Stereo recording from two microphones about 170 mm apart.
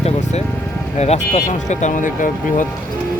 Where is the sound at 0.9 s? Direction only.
40° left (ahead or behind).